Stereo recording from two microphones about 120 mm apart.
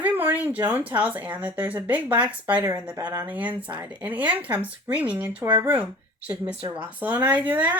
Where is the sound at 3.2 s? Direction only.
10° right (ahead or behind).